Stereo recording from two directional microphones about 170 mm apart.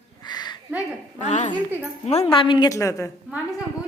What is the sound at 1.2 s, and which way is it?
A woman's voice, 45° left (ahead or behind).